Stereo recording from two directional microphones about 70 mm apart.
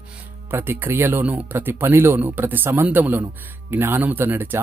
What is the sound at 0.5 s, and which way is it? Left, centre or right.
Speech, right.